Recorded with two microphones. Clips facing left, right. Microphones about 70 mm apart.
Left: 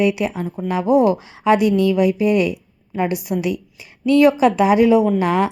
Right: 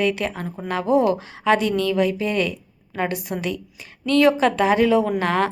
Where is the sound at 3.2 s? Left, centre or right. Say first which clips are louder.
Left 6 dB; right.